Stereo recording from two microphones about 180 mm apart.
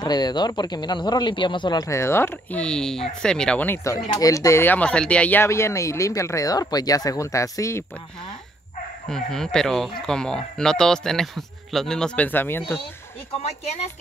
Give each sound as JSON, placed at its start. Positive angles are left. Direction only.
{"t": 0.0, "sound": "speech", "side_deg": 25}
{"t": 9.1, "sound": "speech", "side_deg": 5}
{"t": 13.4, "sound": "speech", "side_deg": 35}